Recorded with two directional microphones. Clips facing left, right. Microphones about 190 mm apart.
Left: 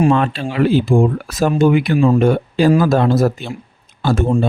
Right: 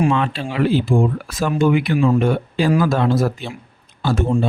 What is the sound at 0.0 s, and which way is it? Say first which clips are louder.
Speech: left 4 dB; 45° left (ahead or behind).